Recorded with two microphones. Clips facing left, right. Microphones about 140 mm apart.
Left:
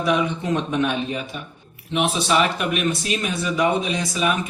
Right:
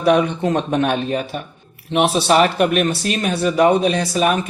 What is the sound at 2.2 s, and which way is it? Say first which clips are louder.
Speech: right 6 dB; 50° right (ahead or behind).